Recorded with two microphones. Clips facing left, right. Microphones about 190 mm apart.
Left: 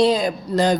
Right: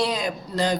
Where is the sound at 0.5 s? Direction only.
45° left (ahead or behind).